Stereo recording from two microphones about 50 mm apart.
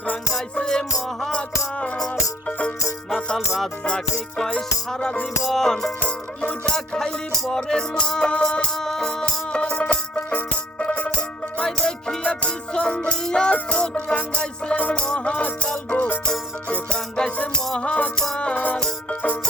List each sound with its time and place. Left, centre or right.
0.5 s music: centre
3.8 s music: centre
6.1 s music: left
6.7 s music: centre
8.7 s music: centre
9.5 s music: centre
10.2 s music: left
11.6 s music: centre
17.3 s music: left
18.5 s music: left